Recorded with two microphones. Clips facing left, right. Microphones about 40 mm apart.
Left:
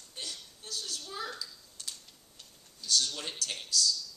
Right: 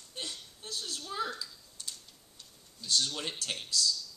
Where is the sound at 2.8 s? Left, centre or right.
Right.